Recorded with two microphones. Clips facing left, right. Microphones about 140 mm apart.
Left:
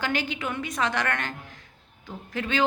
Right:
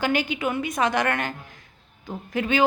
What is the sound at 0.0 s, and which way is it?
A woman's voice, 15° right (ahead or behind).